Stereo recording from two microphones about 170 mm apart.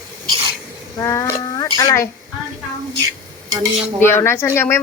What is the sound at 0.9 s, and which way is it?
Speech, 20° left (ahead or behind).